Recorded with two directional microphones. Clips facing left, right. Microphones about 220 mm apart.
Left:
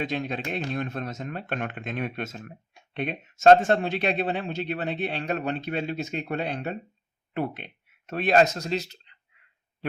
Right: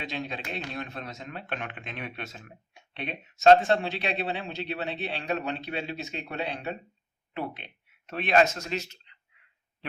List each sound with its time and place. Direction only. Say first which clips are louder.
0.0 s speech: left 6 dB; 50° left (ahead or behind)